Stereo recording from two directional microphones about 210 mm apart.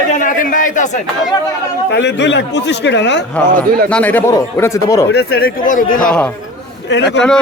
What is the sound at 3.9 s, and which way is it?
Speech, 10° left (ahead or behind).